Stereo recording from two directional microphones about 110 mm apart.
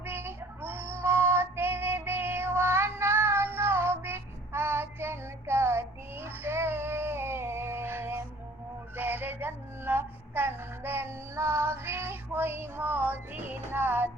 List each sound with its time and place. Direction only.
0.0 s child singing: 20° right (ahead or behind)
9.0 s music: 15° right (ahead or behind)